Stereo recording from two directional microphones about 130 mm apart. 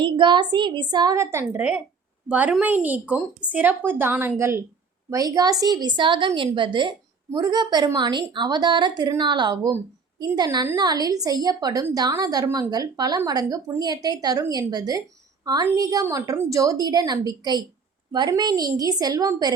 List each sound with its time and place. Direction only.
0.0 s a woman's voice: 35° right (ahead or behind)